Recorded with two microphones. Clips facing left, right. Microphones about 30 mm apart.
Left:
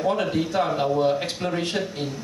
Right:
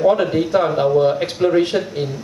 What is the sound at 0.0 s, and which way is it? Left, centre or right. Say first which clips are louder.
A man's voice: right 8 dB; centre.